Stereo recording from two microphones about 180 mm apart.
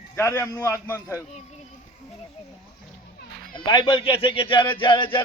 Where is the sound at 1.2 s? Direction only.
40° left (ahead or behind).